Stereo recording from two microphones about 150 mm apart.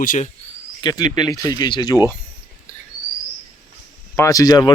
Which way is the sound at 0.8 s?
25° left (ahead or behind).